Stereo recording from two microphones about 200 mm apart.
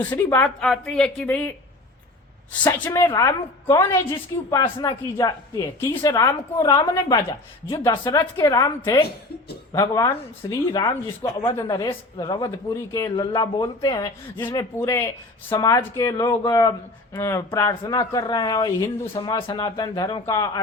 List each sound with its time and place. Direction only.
0.1 s a woman's voice: 10° left (ahead or behind)